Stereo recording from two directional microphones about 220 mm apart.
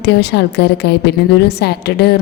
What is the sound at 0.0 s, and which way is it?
A woman's voice, 50° left (ahead or behind).